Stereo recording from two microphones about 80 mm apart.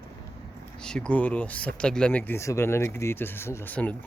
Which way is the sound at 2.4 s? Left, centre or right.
Left.